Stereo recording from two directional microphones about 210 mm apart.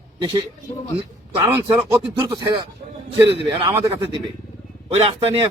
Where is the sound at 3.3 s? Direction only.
25° right (ahead or behind).